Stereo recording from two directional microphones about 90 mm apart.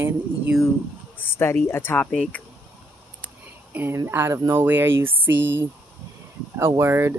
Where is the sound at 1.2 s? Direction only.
25° left (ahead or behind).